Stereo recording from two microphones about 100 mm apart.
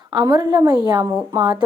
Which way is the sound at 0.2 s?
45° right (ahead or behind).